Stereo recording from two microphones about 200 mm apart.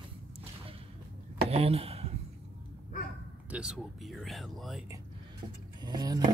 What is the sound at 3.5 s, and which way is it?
Speech, 5° right (ahead or behind).